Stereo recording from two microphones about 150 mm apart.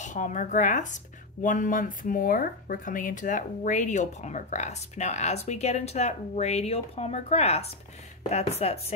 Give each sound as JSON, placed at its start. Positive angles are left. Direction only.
{"t": 0.0, "sound": "speech", "side_deg": 55}